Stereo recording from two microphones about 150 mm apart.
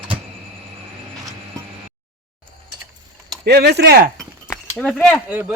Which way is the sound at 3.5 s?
90° right.